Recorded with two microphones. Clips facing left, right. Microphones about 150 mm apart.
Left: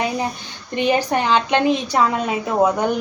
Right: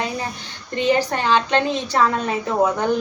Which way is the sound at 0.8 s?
15° left (ahead or behind).